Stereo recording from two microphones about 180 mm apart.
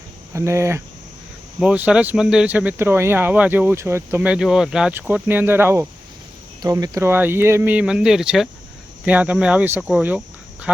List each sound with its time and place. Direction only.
0.3 s speech: 15° right (ahead or behind)